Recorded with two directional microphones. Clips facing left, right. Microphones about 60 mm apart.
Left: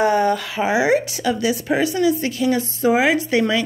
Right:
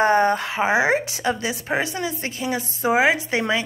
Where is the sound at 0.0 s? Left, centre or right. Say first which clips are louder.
Even; right.